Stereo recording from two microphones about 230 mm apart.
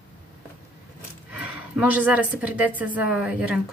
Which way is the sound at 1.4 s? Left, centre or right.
Centre.